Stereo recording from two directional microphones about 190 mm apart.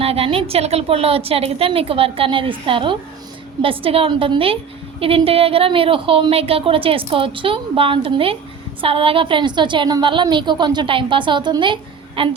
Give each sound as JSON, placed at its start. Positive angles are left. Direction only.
{"t": 0.0, "sound": "a woman's voice", "side_deg": -30}